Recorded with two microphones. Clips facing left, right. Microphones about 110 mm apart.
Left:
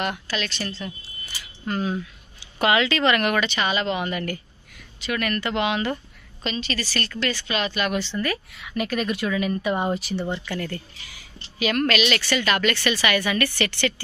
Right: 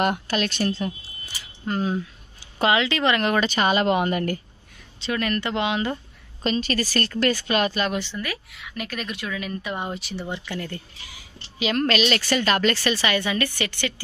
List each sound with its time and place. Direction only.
0.0 s a woman's voice: 50° right (ahead or behind)
1.7 s a woman's voice: 25° right (ahead or behind)
3.3 s a woman's voice: 40° right (ahead or behind)
5.0 s a woman's voice: 25° right (ahead or behind)
6.4 s a woman's voice: 45° right (ahead or behind)
8.0 s a woman's voice: 10° right (ahead or behind)
10.3 s speech: 15° right (ahead or behind)
11.6 s a woman's voice: 30° right (ahead or behind)